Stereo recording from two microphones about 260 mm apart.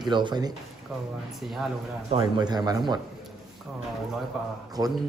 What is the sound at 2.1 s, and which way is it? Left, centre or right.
Speech, centre.